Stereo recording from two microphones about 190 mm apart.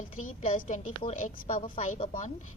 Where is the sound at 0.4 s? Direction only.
40° left (ahead or behind).